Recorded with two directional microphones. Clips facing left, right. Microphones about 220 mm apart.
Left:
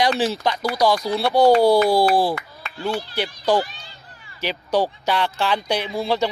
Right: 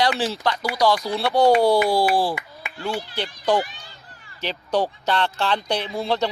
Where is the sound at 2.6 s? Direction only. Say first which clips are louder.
Even; 15° right (ahead or behind).